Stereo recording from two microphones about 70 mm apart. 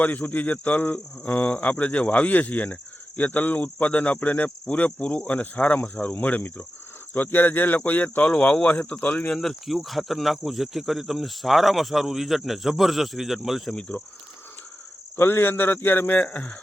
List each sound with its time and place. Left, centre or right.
0.0 s speech: left
9.3 s speech: centre
13.7 s speech: centre
15.1 s speech: left